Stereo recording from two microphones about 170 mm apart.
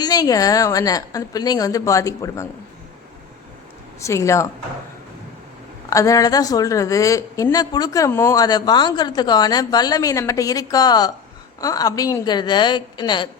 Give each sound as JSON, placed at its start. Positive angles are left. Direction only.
{"t": 0.0, "sound": "speech", "side_deg": 20}
{"t": 4.0, "sound": "speech", "side_deg": 15}
{"t": 5.9, "sound": "speech", "side_deg": 20}